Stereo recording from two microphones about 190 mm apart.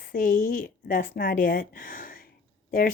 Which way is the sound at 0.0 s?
45° left (ahead or behind).